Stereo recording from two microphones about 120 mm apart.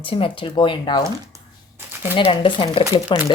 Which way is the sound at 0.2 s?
45° left (ahead or behind).